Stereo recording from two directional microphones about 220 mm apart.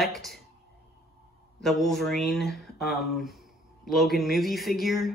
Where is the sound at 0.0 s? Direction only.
Centre (ahead or behind).